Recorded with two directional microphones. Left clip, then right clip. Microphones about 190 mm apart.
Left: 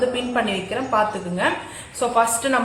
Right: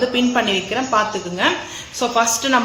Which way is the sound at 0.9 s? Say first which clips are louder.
Right 1 dB; 45° right (ahead or behind).